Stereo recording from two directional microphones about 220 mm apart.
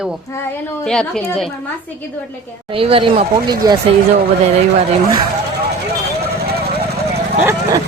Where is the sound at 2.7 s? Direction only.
25° right (ahead or behind).